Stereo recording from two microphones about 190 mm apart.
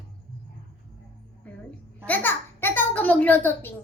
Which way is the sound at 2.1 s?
10° left (ahead or behind).